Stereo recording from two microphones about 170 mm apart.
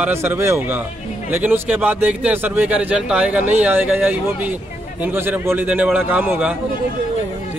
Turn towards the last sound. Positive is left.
turn(degrees=-10)  # may be behind; listen again after turning